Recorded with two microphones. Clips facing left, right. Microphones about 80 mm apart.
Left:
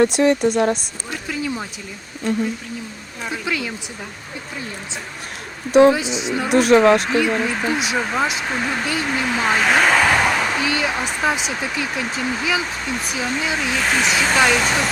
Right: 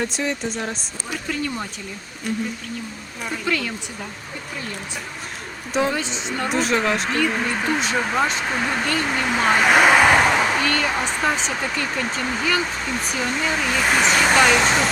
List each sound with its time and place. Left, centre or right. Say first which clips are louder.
0.0 s speech: left 10 dB; left
1.3 s a sound: left 1 dB; centre
3.2 s a woman's voice: even; centre
5.9 s a woman's voice: left 5 dB; centre
6.5 s speech: left 9 dB; left
7.0 s speech: left 3 dB; centre
10.6 s speech: even; centre
14.3 s speech: right 1 dB; centre